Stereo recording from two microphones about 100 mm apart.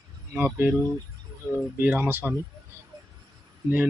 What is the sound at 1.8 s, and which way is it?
Speech, 20° right (ahead or behind).